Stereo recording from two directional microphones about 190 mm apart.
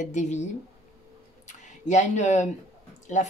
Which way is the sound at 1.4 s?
40° left (ahead or behind).